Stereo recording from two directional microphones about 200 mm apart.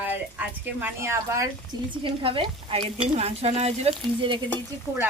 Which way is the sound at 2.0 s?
25° right (ahead or behind).